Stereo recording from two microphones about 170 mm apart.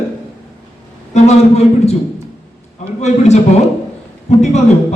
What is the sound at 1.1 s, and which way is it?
Speech, 40° left (ahead or behind).